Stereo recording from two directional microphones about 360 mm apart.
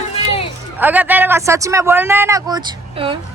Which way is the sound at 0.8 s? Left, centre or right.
Centre.